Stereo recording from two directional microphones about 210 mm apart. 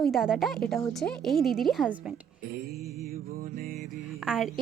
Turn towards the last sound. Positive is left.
turn(degrees=0)  # may be behind; listen again after turning